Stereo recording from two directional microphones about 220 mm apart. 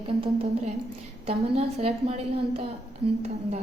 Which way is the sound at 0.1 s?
25° right (ahead or behind).